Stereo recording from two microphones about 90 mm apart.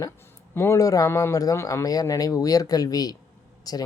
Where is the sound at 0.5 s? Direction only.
30° left (ahead or behind).